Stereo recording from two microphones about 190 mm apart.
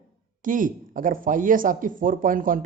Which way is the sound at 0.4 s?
45° right (ahead or behind).